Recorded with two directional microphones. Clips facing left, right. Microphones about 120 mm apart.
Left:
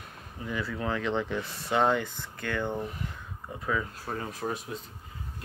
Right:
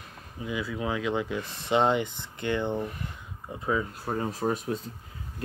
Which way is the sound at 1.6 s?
20° right (ahead or behind).